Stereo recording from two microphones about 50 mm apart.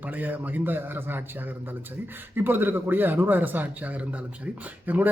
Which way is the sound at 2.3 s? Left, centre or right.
Right.